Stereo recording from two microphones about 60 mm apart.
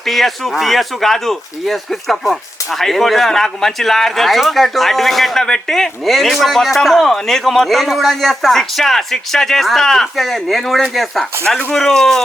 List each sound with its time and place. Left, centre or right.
0.0 s speech: centre